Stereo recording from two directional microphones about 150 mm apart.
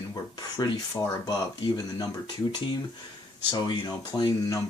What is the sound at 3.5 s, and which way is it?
Speech, 25° left (ahead or behind).